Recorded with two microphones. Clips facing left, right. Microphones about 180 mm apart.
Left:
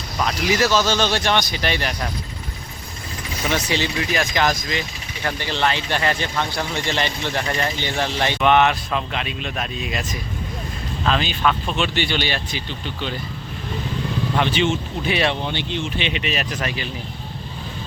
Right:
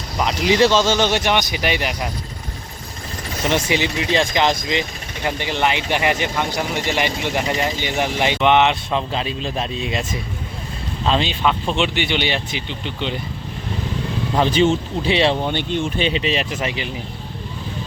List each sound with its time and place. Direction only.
0.2 s speech: 20° right (ahead or behind)
3.7 s speech: 20° right (ahead or behind)
14.3 s speech: 35° right (ahead or behind)
15.1 s speech: 25° right (ahead or behind)
15.4 s speech: 50° right (ahead or behind); by 16.9 s 20° right (ahead or behind)